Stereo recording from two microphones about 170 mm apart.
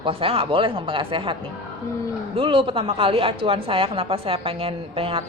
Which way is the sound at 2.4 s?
30° right (ahead or behind).